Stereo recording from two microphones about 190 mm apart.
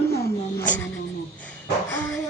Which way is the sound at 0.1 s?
55° left (ahead or behind).